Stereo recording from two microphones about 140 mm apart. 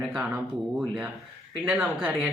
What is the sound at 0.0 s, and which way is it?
Speech, 5° right (ahead or behind).